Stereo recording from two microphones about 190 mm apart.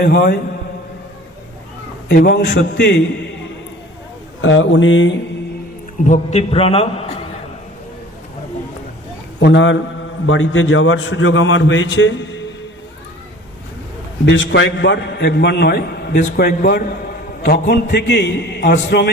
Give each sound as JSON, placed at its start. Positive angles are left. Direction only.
{"t": 0.0, "sound": "a man's voice", "side_deg": 60}
{"t": 2.1, "sound": "a man's voice", "side_deg": 60}
{"t": 4.4, "sound": "speech", "side_deg": 90}
{"t": 6.1, "sound": "a man's voice", "side_deg": 30}
{"t": 9.4, "sound": "a man's voice", "side_deg": 70}
{"t": 14.3, "sound": "a man's voice", "side_deg": 75}